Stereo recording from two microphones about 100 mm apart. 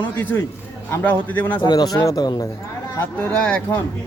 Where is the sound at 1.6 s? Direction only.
45° left (ahead or behind).